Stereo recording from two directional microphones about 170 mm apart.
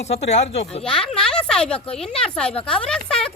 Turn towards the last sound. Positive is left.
turn(degrees=5)  # may be behind; listen again after turning